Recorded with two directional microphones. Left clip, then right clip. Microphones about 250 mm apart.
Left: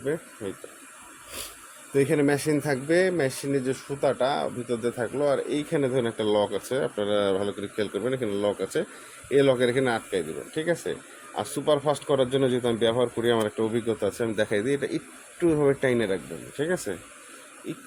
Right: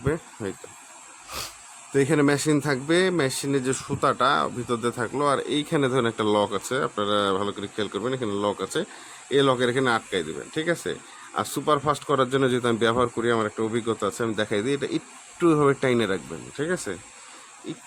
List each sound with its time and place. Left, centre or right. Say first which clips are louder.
1.9 s speech: right 1 dB; centre